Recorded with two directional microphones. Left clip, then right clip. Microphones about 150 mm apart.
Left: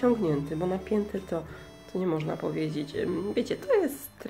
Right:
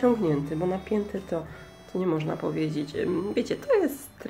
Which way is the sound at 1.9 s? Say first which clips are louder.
Right 2 dB; 5° left (ahead or behind).